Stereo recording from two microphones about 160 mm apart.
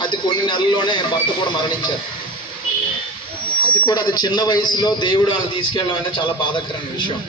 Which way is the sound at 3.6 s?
30° left (ahead or behind).